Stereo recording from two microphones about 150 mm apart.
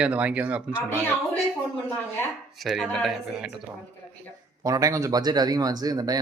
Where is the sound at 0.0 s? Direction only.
10° right (ahead or behind).